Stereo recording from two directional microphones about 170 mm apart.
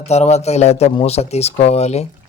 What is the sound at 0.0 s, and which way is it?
Speech, 40° left (ahead or behind).